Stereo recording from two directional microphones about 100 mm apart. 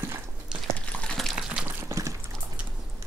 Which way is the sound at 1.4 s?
10° right (ahead or behind).